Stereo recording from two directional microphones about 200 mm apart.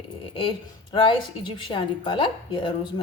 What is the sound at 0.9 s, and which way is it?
A woman's voice, 25° left (ahead or behind).